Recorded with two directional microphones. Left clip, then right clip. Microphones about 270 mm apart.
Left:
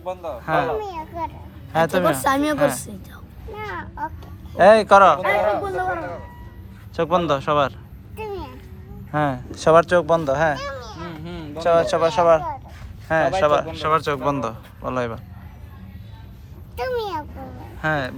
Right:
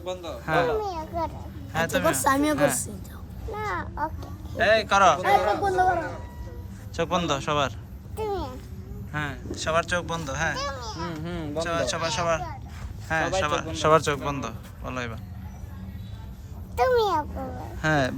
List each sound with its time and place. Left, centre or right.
0.4 s a man's voice: centre
2.2 s a woman's voice: centre
2.6 s a man's voice: centre
4.5 s a man's voice: centre
5.2 s speech: centre
6.9 s a man's voice: centre
8.1 s a sound: centre
9.1 s a man's voice: centre
10.6 s a sound: centre
13.1 s a man's voice: centre
13.7 s a man's voice: centre
16.9 s a child's voice: centre